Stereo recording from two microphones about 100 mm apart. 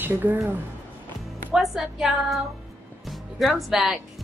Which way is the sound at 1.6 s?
5° right (ahead or behind).